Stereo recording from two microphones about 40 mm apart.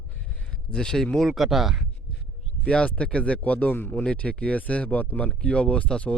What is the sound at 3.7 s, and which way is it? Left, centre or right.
Speech, left.